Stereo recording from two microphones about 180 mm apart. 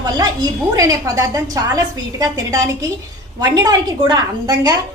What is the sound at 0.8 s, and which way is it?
A woman's voice, 20° right (ahead or behind).